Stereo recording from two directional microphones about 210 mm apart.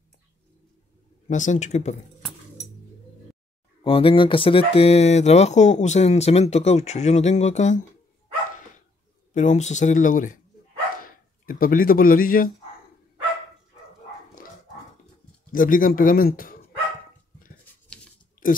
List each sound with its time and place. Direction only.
1.3 s speech: 35° left (ahead or behind)
3.8 s speech: 25° left (ahead or behind)
9.3 s speech: 35° left (ahead or behind)
11.4 s speech: 40° left (ahead or behind)
15.5 s speech: 40° left (ahead or behind)